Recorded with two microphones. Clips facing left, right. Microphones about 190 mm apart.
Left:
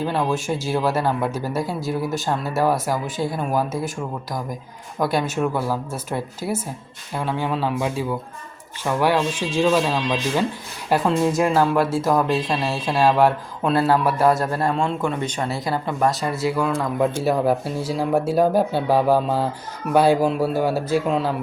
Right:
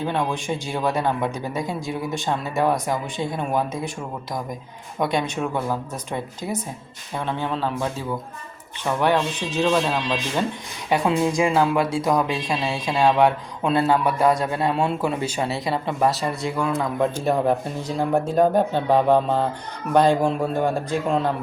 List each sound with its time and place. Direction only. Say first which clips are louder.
0.0 s speech: left 2 dB; 5° left (ahead or behind)
4.9 s speech: left 2 dB; centre (ahead or behind)